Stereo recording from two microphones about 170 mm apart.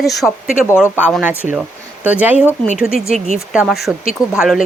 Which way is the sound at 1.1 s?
5° right (ahead or behind).